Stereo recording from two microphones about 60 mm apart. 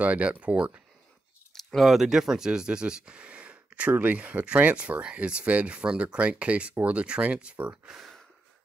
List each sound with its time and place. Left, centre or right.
0.0 s speech: right
1.5 s speech: centre; by 7.7 s right
7.8 s speech: centre